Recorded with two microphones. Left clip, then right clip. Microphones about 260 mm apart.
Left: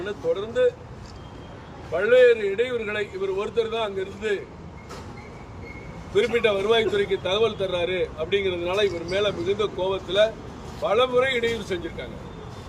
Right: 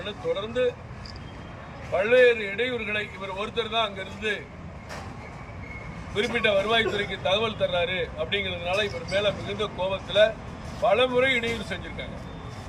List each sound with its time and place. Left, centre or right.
0.0 s a man's voice: centre
2.0 s a man's voice: centre
6.1 s a man's voice: centre